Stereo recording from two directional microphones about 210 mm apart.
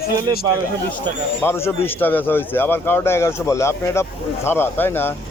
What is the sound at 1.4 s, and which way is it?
Speech, 10° left (ahead or behind).